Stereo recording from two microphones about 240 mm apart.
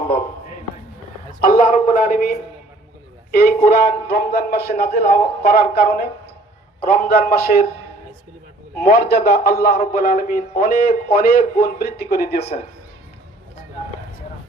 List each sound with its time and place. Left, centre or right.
1.4 s speech: left
8.8 s speech: left